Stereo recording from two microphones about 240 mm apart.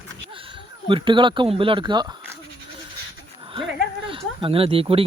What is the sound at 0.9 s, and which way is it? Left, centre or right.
Speech, right.